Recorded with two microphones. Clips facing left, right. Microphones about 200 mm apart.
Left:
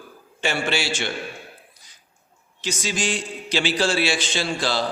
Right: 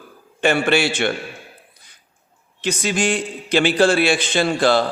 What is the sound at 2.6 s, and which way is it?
A man's voice, 60° right (ahead or behind).